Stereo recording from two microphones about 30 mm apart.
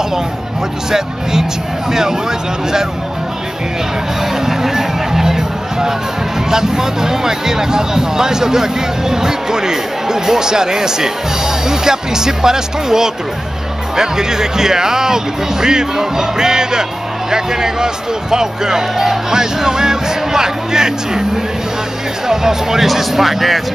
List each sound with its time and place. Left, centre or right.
1.9 s speech: centre
4.2 s music: centre
6.5 s speech: centre
22.3 s speech: centre